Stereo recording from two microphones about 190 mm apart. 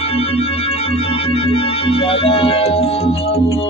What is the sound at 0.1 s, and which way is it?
Music, 30° left (ahead or behind).